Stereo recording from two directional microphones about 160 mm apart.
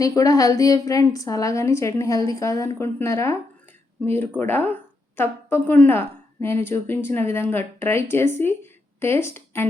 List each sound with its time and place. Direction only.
0.0 s a woman's voice: 20° left (ahead or behind)